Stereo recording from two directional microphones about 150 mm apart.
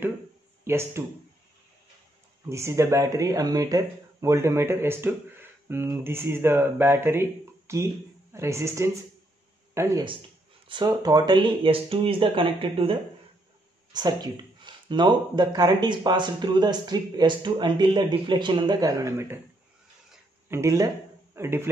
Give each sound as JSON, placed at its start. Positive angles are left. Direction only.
{"t": 0.7, "sound": "speech", "side_deg": -15}
{"t": 2.5, "sound": "speech", "side_deg": -20}
{"t": 13.9, "sound": "speech", "side_deg": -30}
{"t": 18.8, "sound": "speech", "side_deg": -20}
{"t": 20.4, "sound": "speech", "side_deg": -20}